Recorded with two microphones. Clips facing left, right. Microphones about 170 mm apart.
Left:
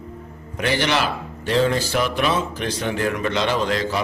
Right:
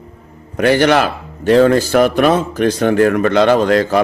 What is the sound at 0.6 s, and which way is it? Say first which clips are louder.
Speech: right 9 dB; 50° right (ahead or behind).